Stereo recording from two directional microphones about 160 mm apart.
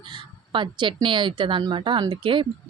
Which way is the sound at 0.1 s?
30° right (ahead or behind).